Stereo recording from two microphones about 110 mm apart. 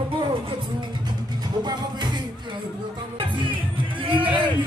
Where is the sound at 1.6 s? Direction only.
40° right (ahead or behind).